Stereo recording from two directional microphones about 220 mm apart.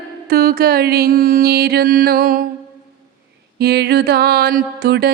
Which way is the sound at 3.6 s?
45° right (ahead or behind).